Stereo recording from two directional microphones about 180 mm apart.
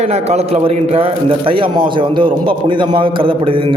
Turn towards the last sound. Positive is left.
turn(degrees=-30)  # may be behind; listen again after turning